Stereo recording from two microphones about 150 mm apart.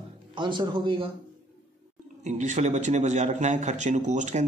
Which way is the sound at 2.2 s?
55° right (ahead or behind).